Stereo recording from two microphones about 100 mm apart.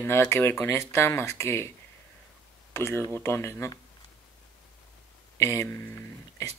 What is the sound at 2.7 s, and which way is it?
Speech, 25° left (ahead or behind).